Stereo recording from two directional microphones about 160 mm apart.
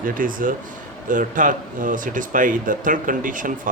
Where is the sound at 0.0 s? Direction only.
60° right (ahead or behind).